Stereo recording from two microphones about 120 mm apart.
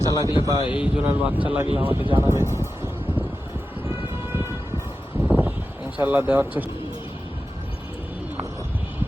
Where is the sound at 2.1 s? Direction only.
20° right (ahead or behind).